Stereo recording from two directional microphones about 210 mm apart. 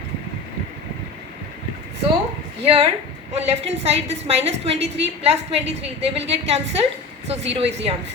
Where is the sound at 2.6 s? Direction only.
25° right (ahead or behind).